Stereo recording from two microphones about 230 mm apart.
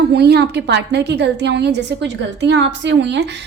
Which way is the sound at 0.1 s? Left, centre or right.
Right.